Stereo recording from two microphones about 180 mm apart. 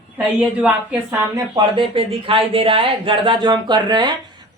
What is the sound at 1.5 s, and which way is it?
A woman's voice, 30° right (ahead or behind).